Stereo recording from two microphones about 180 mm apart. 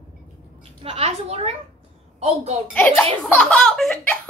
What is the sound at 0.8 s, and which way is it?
A woman's voice, 35° right (ahead or behind).